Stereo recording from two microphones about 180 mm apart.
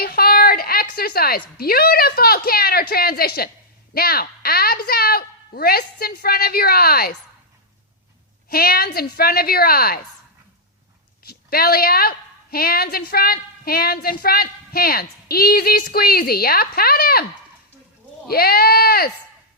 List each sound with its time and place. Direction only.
0.0 s a woman's voice: 60° left (ahead or behind)
8.4 s a woman's voice: 55° left (ahead or behind)
11.2 s a woman's voice: 60° left (ahead or behind)
18.3 s a woman's voice: 55° left (ahead or behind)